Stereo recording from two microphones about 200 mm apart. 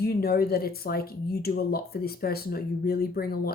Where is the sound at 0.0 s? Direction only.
50° left (ahead or behind).